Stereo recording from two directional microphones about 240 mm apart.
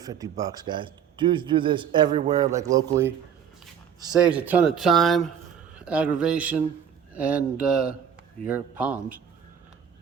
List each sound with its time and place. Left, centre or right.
0.0 s speech: centre
4.1 s speech: centre